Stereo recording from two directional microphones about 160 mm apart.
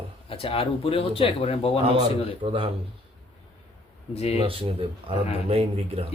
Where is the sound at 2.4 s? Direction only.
35° right (ahead or behind).